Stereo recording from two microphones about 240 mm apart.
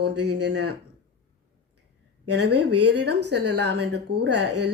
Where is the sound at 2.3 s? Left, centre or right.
Right.